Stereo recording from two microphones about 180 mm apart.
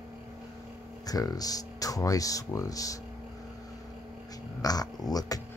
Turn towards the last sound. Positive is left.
turn(degrees=20)  # may be behind; listen again after turning